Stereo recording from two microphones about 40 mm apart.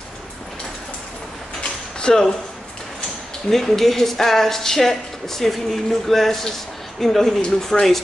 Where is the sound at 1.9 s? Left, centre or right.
Centre.